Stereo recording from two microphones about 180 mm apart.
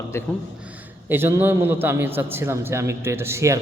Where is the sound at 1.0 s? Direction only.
10° right (ahead or behind).